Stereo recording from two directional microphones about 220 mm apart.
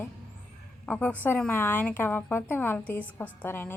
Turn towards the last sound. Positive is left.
turn(degrees=10)  # may be behind; listen again after turning